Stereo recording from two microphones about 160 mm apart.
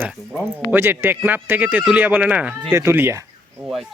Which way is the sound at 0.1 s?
5° right (ahead or behind).